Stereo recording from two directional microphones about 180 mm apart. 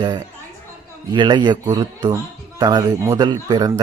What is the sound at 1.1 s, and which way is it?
A man's voice, 25° right (ahead or behind).